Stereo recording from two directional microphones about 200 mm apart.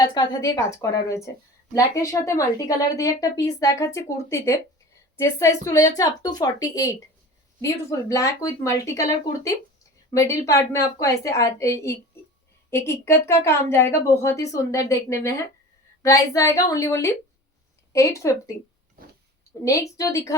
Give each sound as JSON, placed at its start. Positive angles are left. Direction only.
{"t": 0.0, "sound": "a woman's voice", "side_deg": 20}
{"t": 12.7, "sound": "a woman's voice", "side_deg": 10}
{"t": 19.5, "sound": "a sound", "side_deg": 15}
{"t": 20.0, "sound": "a woman's voice", "side_deg": 15}